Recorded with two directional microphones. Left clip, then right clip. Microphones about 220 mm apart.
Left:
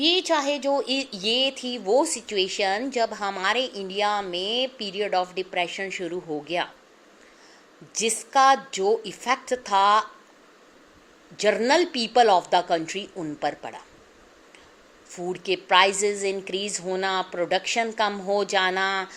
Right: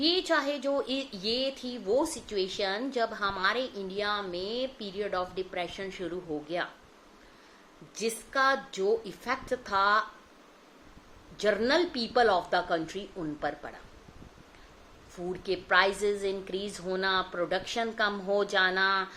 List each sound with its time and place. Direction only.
0.0 s speech: 20° left (ahead or behind)
4.3 s a woman's voice: 10° right (ahead or behind)
4.6 s speech: 25° left (ahead or behind)
7.9 s speech: 25° left (ahead or behind)
11.3 s speech: 25° left (ahead or behind)
15.1 s speech: 25° left (ahead or behind)